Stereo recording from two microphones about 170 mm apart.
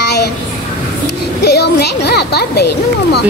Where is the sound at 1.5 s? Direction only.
70° left (ahead or behind).